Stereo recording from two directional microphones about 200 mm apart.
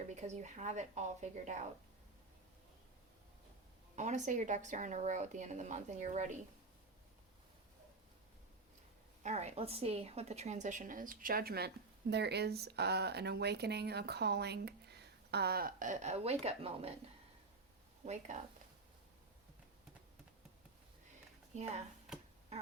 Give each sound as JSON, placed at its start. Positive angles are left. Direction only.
{"t": 0.1, "sound": "a woman's voice", "side_deg": -35}
{"t": 3.9, "sound": "a woman's voice", "side_deg": -35}
{"t": 9.2, "sound": "a woman's voice", "side_deg": -35}
{"t": 18.0, "sound": "a woman's voice", "side_deg": -35}
{"t": 21.5, "sound": "a woman's voice", "side_deg": -35}